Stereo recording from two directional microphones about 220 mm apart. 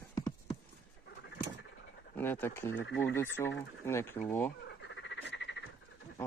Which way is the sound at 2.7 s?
55° left (ahead or behind).